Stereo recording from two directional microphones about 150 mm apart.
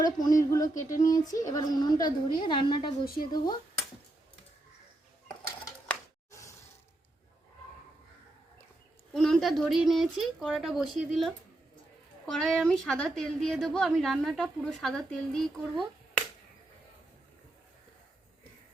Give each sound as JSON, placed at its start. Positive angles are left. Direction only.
{"t": 0.0, "sound": "a woman's voice", "side_deg": 25}
{"t": 5.9, "sound": "a sound", "side_deg": 20}
{"t": 9.1, "sound": "a woman's voice", "side_deg": 5}